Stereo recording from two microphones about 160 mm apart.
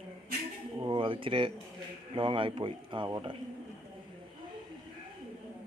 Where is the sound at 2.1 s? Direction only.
30° right (ahead or behind).